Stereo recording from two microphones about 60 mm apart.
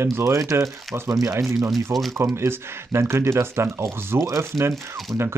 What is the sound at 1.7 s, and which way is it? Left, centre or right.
Speech, centre.